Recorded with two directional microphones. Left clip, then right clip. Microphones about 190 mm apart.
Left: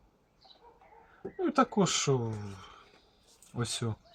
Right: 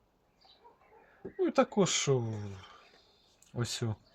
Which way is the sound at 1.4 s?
20° right (ahead or behind).